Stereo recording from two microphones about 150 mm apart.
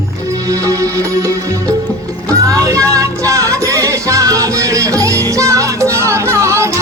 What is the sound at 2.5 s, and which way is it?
Music, 20° right (ahead or behind).